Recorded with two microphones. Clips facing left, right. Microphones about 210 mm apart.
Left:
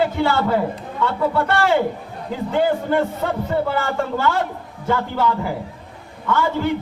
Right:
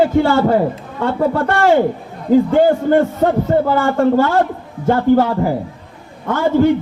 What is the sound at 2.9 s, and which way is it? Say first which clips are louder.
A man's voice: right 7 dB; 45° right (ahead or behind).